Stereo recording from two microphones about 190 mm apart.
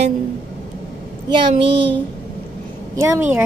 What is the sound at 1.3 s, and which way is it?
Speech, 25° right (ahead or behind).